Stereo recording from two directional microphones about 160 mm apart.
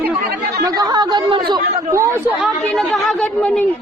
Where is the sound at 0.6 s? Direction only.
25° right (ahead or behind).